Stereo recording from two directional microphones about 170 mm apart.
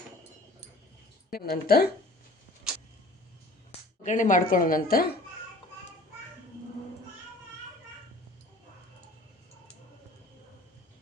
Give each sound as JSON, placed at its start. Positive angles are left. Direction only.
{"t": 1.3, "sound": "speech", "side_deg": 65}
{"t": 3.7, "sound": "speech", "side_deg": 45}